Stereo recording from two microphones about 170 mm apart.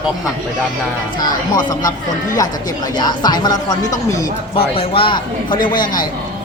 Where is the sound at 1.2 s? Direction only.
25° left (ahead or behind).